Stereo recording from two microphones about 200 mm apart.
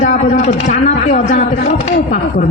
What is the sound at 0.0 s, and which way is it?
A woman's voice, 35° left (ahead or behind).